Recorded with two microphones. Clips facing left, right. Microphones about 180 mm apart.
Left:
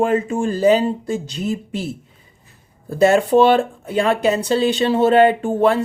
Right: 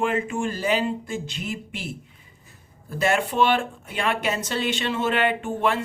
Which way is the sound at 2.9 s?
35° left (ahead or behind).